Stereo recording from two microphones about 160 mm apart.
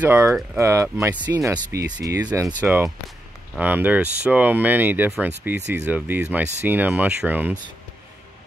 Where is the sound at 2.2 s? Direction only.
10° right (ahead or behind).